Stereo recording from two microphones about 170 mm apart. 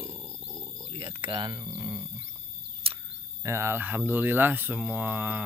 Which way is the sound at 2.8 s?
35° right (ahead or behind).